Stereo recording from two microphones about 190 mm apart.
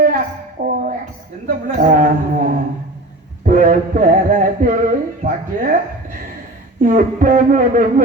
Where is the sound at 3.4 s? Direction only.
45° right (ahead or behind).